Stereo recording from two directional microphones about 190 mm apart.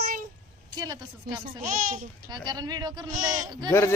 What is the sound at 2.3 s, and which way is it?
A woman's voice, 20° right (ahead or behind).